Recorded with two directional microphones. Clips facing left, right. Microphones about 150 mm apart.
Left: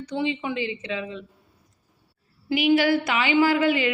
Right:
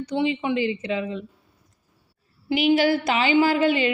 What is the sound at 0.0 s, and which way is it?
A woman's voice, 30° right (ahead or behind).